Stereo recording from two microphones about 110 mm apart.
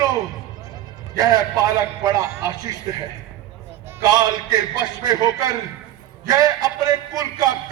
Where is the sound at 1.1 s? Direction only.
35° right (ahead or behind).